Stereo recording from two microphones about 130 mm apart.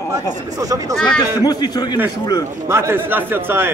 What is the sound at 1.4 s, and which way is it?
Speech, 30° left (ahead or behind).